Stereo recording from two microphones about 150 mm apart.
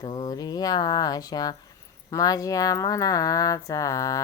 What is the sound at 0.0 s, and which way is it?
Speech, 30° left (ahead or behind).